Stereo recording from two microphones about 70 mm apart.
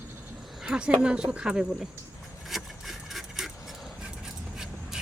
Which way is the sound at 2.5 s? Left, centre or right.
Centre.